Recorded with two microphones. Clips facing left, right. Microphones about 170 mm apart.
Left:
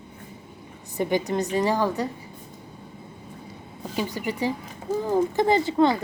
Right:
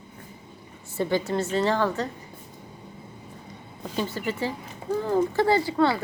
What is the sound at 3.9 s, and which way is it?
Speech, 15° left (ahead or behind).